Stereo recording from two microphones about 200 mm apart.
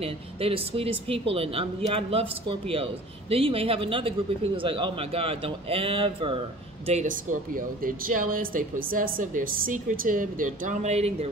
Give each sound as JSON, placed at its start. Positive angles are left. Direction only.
{"t": 0.0, "sound": "speech", "side_deg": -30}
{"t": 6.9, "sound": "speech", "side_deg": -40}